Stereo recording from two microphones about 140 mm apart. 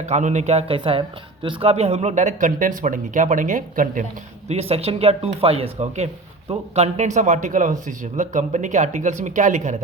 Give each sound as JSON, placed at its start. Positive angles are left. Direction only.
{"t": 0.0, "sound": "speech", "side_deg": -55}
{"t": 4.4, "sound": "speech", "side_deg": -50}